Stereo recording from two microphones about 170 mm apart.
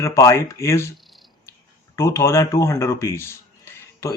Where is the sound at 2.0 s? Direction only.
15° left (ahead or behind).